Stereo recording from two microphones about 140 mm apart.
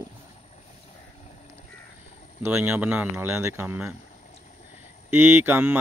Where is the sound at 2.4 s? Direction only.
15° right (ahead or behind).